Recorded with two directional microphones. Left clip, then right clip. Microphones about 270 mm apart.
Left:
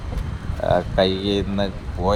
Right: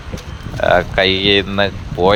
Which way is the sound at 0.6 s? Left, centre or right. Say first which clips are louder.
Right 6 dB; right.